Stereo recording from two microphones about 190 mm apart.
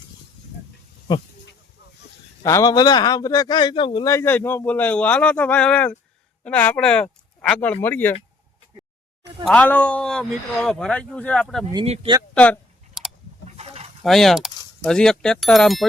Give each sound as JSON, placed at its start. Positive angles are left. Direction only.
{"t": 2.4, "sound": "a man's voice", "side_deg": 15}
{"t": 4.1, "sound": "a man's voice", "side_deg": 10}
{"t": 9.4, "sound": "speech", "side_deg": 5}
{"t": 11.7, "sound": "speech", "side_deg": -25}
{"t": 12.3, "sound": "clicking", "side_deg": 5}
{"t": 14.0, "sound": "speech", "side_deg": 0}